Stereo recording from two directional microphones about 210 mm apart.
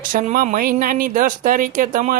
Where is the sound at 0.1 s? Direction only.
40° right (ahead or behind).